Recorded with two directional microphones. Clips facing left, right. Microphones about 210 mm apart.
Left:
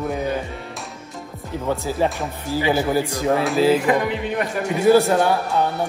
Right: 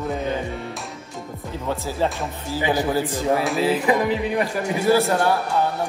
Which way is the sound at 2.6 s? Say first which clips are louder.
Left 2 dB; 15° right (ahead or behind).